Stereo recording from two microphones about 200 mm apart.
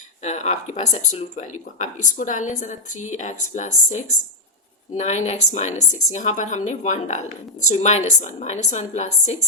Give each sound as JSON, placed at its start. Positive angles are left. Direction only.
{"t": 0.2, "sound": "a woman's voice", "side_deg": 35}
{"t": 4.9, "sound": "a woman's voice", "side_deg": 35}